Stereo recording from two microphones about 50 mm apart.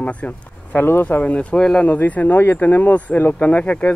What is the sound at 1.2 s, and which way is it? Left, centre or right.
Speech, left.